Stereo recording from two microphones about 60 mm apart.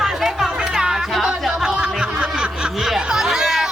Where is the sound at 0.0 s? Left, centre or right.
Centre.